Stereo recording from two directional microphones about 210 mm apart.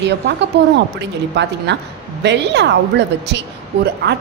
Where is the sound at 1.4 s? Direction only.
55° right (ahead or behind).